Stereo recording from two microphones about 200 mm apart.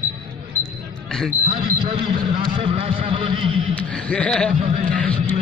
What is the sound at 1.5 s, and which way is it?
A man's voice, 25° right (ahead or behind).